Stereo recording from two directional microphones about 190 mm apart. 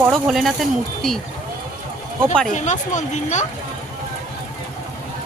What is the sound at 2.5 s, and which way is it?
Speech, 40° left (ahead or behind).